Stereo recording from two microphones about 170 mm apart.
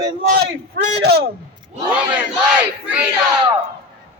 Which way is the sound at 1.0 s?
70° right (ahead or behind).